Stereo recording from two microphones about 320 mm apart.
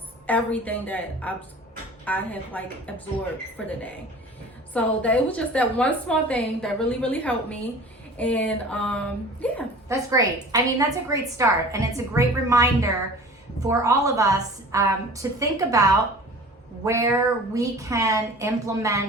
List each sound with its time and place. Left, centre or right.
0.3 s a woman's voice: centre
4.7 s a woman's voice: centre
9.9 s a woman's voice: centre